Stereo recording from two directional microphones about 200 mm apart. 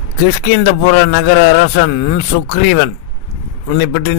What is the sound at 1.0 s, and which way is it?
A man's voice, 50° left (ahead or behind).